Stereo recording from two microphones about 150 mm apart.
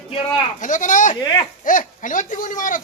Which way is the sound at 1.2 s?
25° left (ahead or behind).